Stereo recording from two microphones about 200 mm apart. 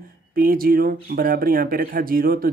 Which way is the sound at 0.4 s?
45° right (ahead or behind).